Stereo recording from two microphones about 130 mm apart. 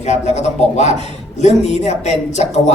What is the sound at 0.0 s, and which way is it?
A man's voice, 60° left (ahead or behind).